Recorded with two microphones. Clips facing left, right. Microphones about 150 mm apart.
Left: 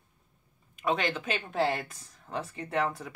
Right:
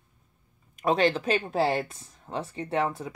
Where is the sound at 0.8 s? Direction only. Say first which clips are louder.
Right 6 dB; 35° right (ahead or behind).